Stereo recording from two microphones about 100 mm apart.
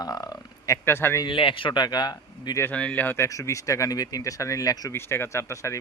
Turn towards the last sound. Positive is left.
turn(degrees=30)  # may be behind; listen again after turning